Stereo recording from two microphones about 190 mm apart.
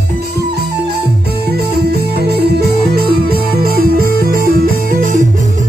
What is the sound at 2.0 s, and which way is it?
Music, 55° right (ahead or behind).